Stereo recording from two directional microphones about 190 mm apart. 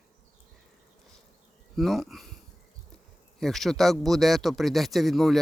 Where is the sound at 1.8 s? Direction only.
Centre (ahead or behind).